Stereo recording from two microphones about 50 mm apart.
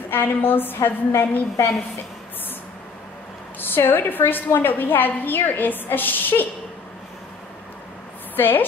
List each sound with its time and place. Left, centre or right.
0.1 s a woman's voice: left
3.7 s a woman's voice: left
8.4 s a woman's voice: left